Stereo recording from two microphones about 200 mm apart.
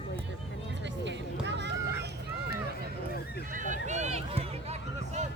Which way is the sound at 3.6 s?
40° right (ahead or behind).